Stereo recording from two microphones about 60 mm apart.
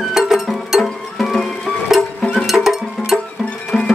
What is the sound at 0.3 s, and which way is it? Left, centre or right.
Music, centre.